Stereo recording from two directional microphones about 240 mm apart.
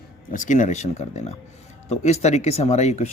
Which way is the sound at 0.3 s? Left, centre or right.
Left.